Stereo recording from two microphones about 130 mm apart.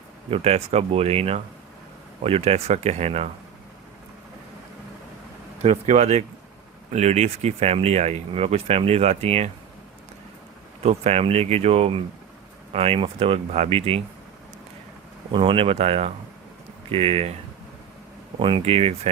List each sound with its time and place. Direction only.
0.3 s speech: 50° right (ahead or behind)
5.6 s speech: 55° right (ahead or behind)
10.8 s speech: 55° right (ahead or behind)
15.3 s speech: 40° right (ahead or behind)
18.3 s speech: 40° right (ahead or behind)